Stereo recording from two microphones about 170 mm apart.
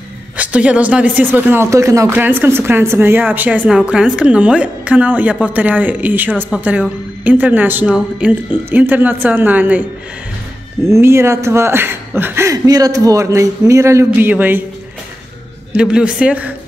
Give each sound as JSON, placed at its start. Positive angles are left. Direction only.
{"t": 0.4, "sound": "speech", "side_deg": -10}
{"t": 10.9, "sound": "speech", "side_deg": -15}
{"t": 15.7, "sound": "speech", "side_deg": -5}